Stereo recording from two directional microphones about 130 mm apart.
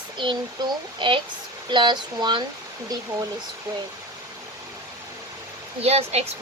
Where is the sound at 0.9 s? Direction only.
40° right (ahead or behind).